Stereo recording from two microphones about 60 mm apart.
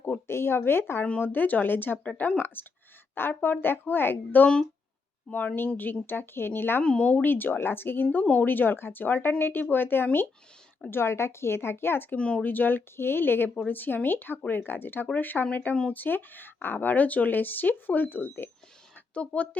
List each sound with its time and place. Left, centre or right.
0.3 s speech: left
1.2 s speech: left
2.6 s speech: left
5.5 s speech: left
6.8 s speech: centre; by 12.0 s left
12.1 s speech: centre
12.4 s speech: left
19.1 s speech: left